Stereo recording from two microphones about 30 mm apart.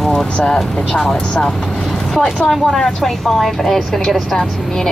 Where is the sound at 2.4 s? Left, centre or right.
Centre.